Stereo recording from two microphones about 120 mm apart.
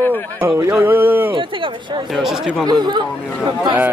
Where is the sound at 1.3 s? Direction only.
45° right (ahead or behind).